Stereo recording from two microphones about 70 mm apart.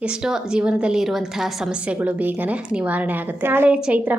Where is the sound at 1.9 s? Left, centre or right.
Right.